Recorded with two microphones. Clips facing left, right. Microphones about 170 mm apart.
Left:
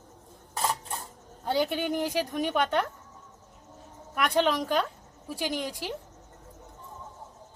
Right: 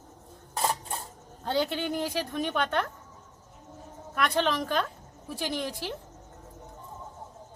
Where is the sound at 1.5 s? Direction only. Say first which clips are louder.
Left 1 dB; 15° left (ahead or behind).